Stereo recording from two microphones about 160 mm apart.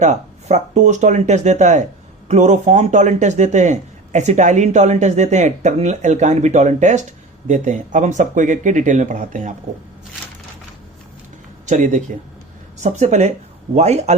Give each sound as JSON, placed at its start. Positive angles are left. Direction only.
{"t": 0.0, "sound": "speech", "side_deg": -45}
{"t": 11.6, "sound": "speech", "side_deg": -50}